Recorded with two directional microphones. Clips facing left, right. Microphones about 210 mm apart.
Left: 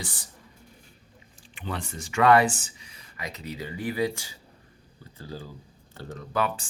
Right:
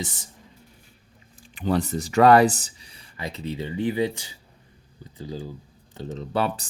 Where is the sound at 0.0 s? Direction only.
20° right (ahead or behind).